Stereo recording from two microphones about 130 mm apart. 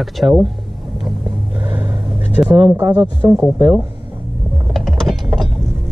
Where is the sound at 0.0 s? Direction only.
Centre (ahead or behind).